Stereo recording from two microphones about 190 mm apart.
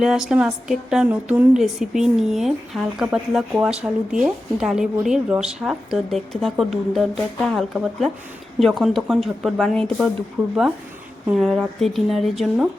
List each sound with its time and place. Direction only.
0.0 s speech: centre (ahead or behind)